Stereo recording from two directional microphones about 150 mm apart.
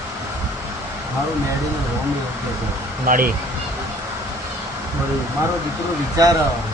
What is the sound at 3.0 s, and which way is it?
Speech, 70° right (ahead or behind).